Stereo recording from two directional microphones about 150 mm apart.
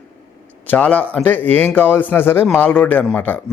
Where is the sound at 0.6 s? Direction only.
10° left (ahead or behind).